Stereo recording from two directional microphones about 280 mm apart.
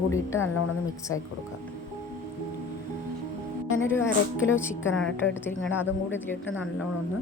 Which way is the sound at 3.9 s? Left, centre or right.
Centre.